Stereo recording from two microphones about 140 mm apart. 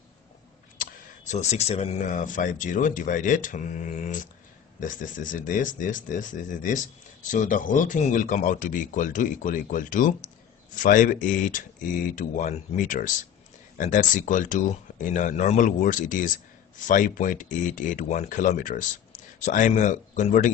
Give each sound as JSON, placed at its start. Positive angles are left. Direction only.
{"t": 0.7, "sound": "speech", "side_deg": 60}